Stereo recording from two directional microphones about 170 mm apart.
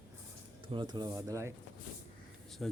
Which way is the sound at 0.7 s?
25° right (ahead or behind).